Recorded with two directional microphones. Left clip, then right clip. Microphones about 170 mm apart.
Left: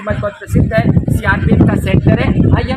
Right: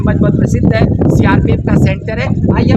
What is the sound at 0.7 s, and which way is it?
Speech, 35° right (ahead or behind).